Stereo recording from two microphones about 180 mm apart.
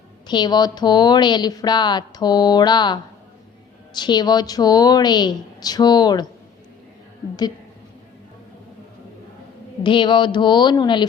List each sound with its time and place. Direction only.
0.3 s speech: 25° left (ahead or behind)
9.8 s speech: 25° left (ahead or behind)